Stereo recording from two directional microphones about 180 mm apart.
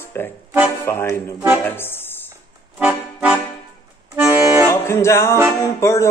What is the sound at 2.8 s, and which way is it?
Accordion, 10° right (ahead or behind).